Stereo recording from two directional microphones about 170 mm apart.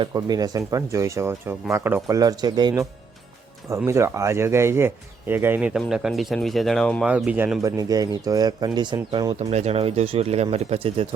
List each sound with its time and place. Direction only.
0.0 s speech: 25° right (ahead or behind)
3.8 s speech: 15° right (ahead or behind)
9.5 s speech: 40° right (ahead or behind)